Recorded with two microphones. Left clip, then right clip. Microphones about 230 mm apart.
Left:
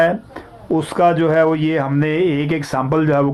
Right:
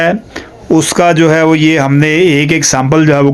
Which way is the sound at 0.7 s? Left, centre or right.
Right.